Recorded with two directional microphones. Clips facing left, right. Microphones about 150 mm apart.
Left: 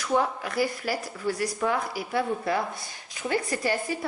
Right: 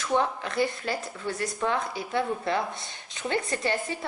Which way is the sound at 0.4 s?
25° right (ahead or behind).